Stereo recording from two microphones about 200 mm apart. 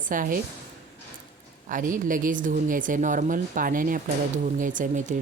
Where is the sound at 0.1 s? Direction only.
45° right (ahead or behind).